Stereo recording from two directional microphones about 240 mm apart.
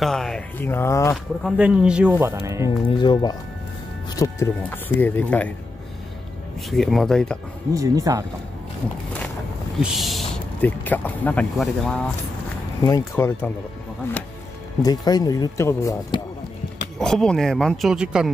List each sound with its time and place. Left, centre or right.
0.0 s speech: centre
1.1 s speech: centre
2.9 s speech: centre
6.7 s speech: centre
7.7 s speech: centre
9.8 s speech: centre
12.8 s speech: centre
14.8 s speech: centre
17.0 s speech: centre